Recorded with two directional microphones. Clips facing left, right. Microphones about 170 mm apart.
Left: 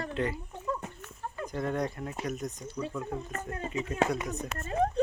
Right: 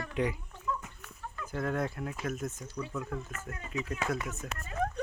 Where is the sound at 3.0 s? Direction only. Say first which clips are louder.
Left 3 dB; 35° left (ahead or behind).